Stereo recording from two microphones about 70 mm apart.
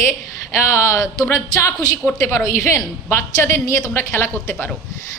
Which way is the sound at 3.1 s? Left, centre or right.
Left.